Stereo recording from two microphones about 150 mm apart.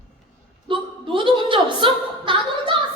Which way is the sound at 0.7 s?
35° right (ahead or behind).